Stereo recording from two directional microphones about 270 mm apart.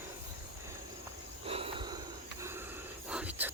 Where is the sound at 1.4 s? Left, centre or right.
Right; by 3.5 s centre.